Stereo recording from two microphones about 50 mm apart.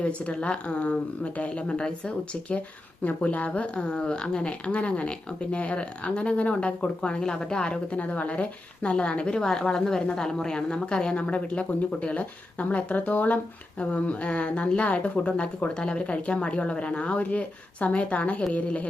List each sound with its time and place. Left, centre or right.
0.0 s a woman's voice: left